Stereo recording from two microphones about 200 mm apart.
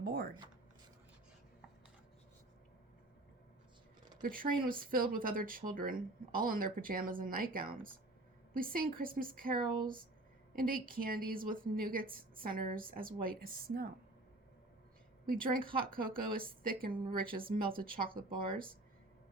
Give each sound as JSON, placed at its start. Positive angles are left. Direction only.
{"t": 0.0, "sound": "a sound", "side_deg": -50}
{"t": 4.2, "sound": "speech", "side_deg": -45}
{"t": 15.3, "sound": "speech", "side_deg": -45}